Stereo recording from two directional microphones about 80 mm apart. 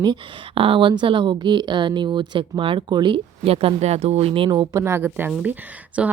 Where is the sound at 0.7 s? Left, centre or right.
Right.